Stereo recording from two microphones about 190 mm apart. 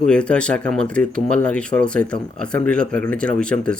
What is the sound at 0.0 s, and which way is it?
Speech, 5° left (ahead or behind).